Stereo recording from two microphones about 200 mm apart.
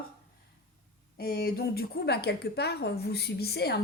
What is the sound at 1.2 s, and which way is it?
A woman's voice, 50° left (ahead or behind).